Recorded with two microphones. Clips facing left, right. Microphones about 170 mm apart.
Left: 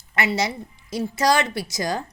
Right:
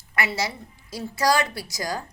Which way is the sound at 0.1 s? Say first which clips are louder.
Left 4 dB; 20° left (ahead or behind).